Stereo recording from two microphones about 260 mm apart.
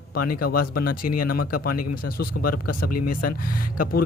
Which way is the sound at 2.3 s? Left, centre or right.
Left.